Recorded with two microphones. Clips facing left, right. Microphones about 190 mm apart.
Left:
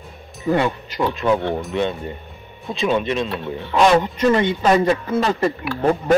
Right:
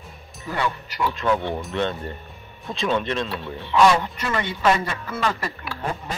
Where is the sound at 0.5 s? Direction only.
20° left (ahead or behind).